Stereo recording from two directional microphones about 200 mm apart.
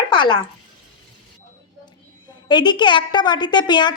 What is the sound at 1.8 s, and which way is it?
A woman's voice, 20° left (ahead or behind).